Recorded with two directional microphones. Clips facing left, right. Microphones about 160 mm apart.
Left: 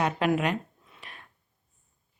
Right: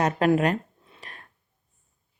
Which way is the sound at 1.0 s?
40° right (ahead or behind).